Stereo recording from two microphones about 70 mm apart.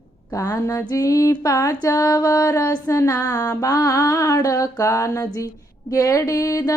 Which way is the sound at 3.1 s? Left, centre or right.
Left.